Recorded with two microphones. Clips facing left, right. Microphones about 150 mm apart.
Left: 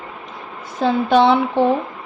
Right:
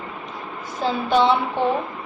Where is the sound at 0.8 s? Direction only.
75° left (ahead or behind).